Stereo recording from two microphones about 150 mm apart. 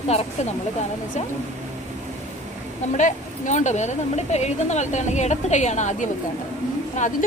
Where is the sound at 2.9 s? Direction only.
55° left (ahead or behind).